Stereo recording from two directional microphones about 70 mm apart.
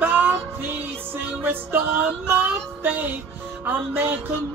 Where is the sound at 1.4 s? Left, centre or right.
Right.